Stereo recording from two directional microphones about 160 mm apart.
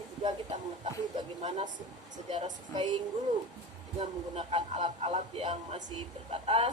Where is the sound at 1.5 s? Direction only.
45° right (ahead or behind).